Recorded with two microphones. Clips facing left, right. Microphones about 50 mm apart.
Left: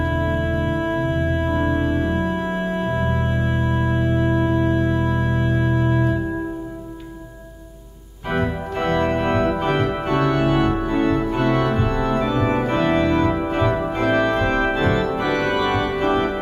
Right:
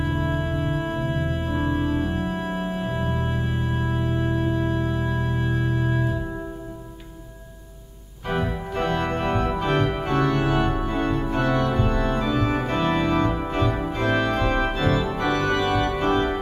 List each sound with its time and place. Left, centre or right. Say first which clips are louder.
0.1 s organ: left 4 dB; left
0.7 s organ: left 5 dB; left
1.4 s organ: left 4 dB; left
8.3 s organ: left 3 dB; centre
14.7 s organ: left 4 dB; centre